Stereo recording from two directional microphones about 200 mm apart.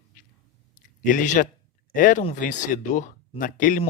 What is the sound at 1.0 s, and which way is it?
Speech, 40° left (ahead or behind).